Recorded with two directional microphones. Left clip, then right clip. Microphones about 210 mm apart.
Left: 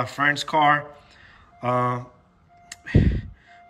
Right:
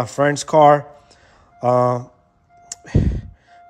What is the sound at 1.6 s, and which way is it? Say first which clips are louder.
Speech: right 7 dB; 30° right (ahead or behind).